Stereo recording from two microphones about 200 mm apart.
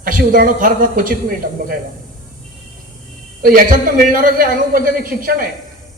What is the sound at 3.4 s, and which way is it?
A man's voice, 45° right (ahead or behind).